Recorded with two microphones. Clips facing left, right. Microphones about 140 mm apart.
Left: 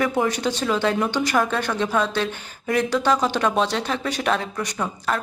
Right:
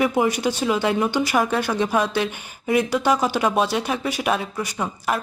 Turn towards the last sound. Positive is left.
turn(degrees=-10)  # may be behind; listen again after turning